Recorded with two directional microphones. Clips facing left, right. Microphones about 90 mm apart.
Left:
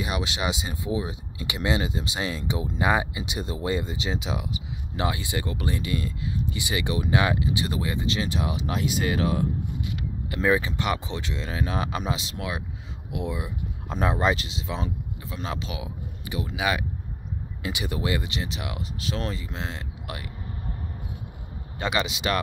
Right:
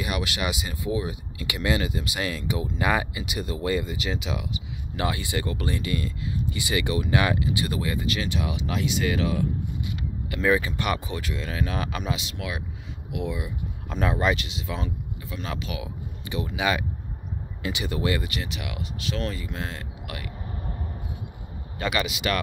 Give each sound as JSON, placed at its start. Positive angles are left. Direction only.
{"t": 0.0, "sound": "speech", "side_deg": 25}
{"t": 4.9, "sound": "speech", "side_deg": 15}
{"t": 10.4, "sound": "speech", "side_deg": 20}
{"t": 16.5, "sound": "speech", "side_deg": 10}
{"t": 21.7, "sound": "speech", "side_deg": 25}